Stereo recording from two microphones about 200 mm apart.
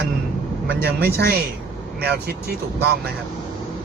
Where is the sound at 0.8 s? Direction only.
50° right (ahead or behind).